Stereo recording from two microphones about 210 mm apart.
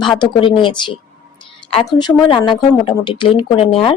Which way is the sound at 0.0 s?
25° left (ahead or behind).